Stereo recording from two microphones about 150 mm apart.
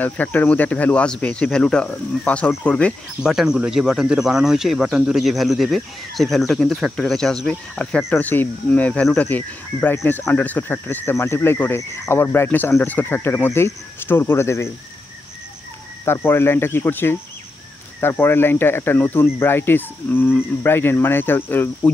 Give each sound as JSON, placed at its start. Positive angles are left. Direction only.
{"t": 0.0, "sound": "speech", "side_deg": 10}
{"t": 3.2, "sound": "speech", "side_deg": 0}
{"t": 16.1, "sound": "speech", "side_deg": 15}